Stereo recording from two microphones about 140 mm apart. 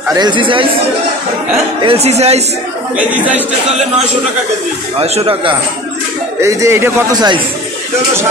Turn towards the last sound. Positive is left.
turn(degrees=-30)  # may be behind; listen again after turning